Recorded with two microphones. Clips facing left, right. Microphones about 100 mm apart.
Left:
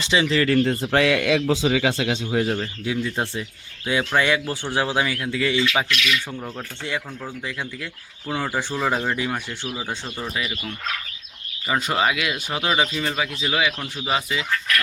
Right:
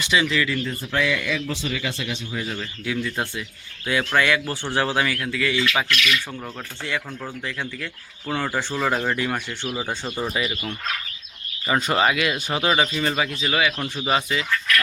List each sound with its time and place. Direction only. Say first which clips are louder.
0.0 s speech: left 1 dB; 25° left (ahead or behind)
0.4 s a man's voice: left 7 dB; 65° left (ahead or behind); by 2.1 s 90° left
2.3 s speech: left 9 dB; 50° left (ahead or behind)
2.6 s speech: left 2 dB; 25° left (ahead or behind)
7.4 s speech: right 1 dB; 15° left (ahead or behind)